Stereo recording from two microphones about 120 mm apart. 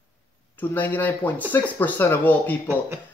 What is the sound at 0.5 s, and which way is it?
Speech, 15° left (ahead or behind).